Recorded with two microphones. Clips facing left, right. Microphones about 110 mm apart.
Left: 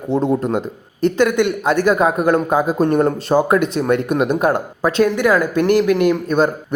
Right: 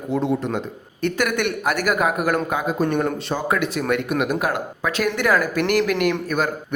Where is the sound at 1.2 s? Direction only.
20° left (ahead or behind).